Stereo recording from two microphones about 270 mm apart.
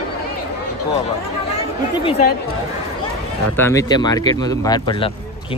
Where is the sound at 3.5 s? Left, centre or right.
Centre.